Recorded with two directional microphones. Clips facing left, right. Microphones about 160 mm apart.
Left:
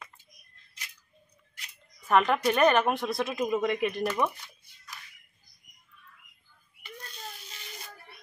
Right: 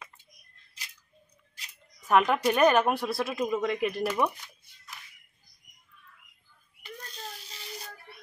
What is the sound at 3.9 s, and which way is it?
Speech, 10° right (ahead or behind).